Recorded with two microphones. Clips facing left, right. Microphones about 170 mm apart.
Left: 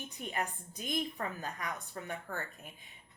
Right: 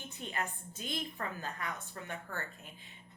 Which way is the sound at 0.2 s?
15° left (ahead or behind).